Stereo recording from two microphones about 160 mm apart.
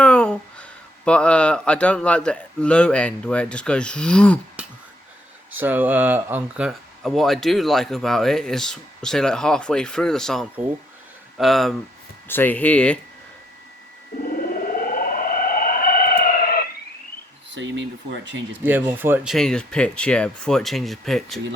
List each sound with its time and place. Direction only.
0.0 s speech: 5° left (ahead or behind)
5.5 s speech: 10° right (ahead or behind)
12.3 s speech: 10° left (ahead or behind)
14.3 s a sound: 60° left (ahead or behind)
18.5 s speech: 10° right (ahead or behind)
19.3 s speech: 5° left (ahead or behind)